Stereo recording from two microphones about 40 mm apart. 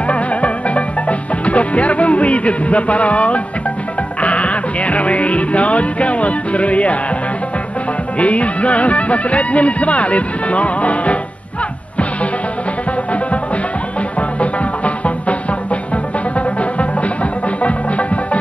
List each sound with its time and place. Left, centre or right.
0.0 s music: left
8.2 s speech: left
14.4 s music: left